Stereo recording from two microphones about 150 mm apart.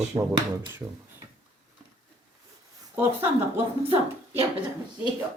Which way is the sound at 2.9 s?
15° right (ahead or behind).